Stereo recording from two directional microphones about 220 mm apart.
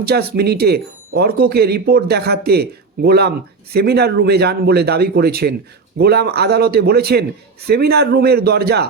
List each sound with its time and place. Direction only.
0.0 s speech: 45° right (ahead or behind)